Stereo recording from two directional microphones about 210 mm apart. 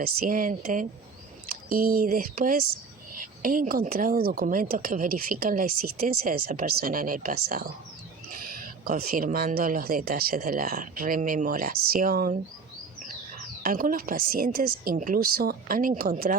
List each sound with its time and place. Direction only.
0.0 s a woman's voice: 45° right (ahead or behind)
13.6 s speech: 40° right (ahead or behind)